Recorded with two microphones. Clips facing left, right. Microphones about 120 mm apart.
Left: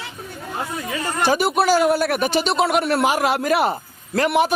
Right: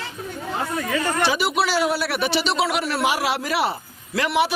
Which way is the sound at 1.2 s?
50° left (ahead or behind).